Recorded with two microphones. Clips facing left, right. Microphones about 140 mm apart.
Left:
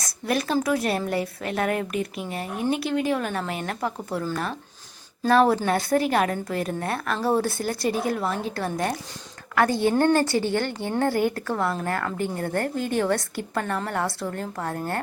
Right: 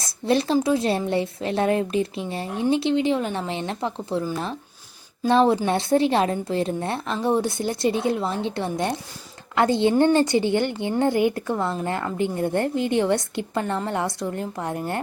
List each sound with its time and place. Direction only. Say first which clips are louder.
0.0 s a woman's voice: right 4 dB; 30° right (ahead or behind)
5.3 s a woman's voice: right 1 dB; 25° right (ahead or behind)